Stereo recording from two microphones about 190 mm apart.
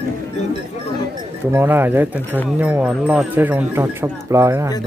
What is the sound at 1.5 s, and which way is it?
Speech, 10° right (ahead or behind).